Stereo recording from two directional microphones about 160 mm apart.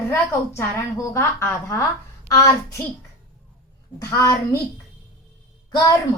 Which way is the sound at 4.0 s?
20° left (ahead or behind).